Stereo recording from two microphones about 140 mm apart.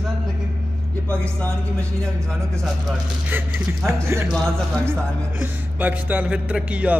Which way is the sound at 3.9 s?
20° right (ahead or behind).